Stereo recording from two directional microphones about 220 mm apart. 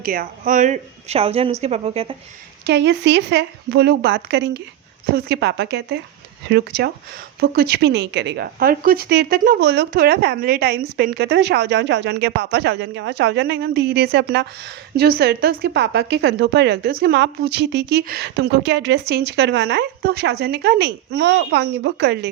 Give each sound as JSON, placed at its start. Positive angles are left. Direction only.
{"t": 0.0, "sound": "speech", "side_deg": -40}
{"t": 2.6, "sound": "speech", "side_deg": -50}